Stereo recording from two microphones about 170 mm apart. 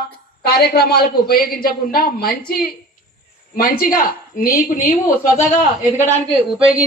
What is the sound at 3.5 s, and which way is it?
A man's voice, 55° left (ahead or behind).